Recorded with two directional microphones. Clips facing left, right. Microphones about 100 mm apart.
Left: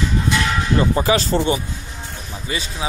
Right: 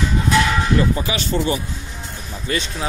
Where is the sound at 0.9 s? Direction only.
40° left (ahead or behind).